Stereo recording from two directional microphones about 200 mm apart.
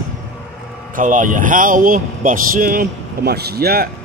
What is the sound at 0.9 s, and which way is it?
A man's voice, 40° right (ahead or behind).